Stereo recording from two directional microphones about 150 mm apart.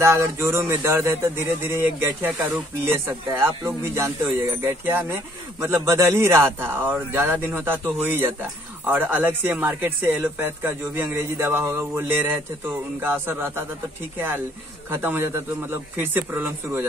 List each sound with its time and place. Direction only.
0.0 s speech: 20° right (ahead or behind)